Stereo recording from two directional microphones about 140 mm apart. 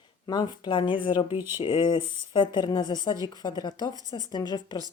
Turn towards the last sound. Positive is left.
turn(degrees=30)  # may be behind; listen again after turning